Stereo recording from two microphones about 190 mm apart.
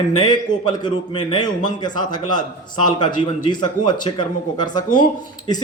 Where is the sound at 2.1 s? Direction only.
20° left (ahead or behind).